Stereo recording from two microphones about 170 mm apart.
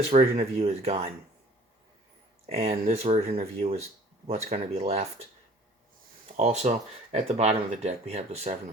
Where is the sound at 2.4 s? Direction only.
35° right (ahead or behind).